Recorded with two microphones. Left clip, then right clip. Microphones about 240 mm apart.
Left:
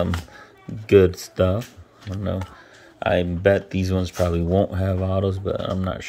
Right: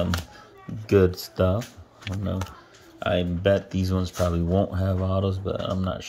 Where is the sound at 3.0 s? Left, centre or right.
Centre.